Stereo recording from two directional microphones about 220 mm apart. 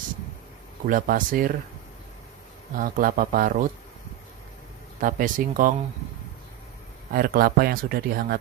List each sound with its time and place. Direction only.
0.8 s speech: 40° right (ahead or behind)
2.7 s speech: 40° right (ahead or behind)
5.0 s speech: 35° right (ahead or behind)
7.2 s speech: 40° right (ahead or behind)